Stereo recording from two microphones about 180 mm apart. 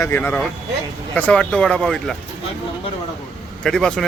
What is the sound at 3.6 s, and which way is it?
Speech, 5° left (ahead or behind).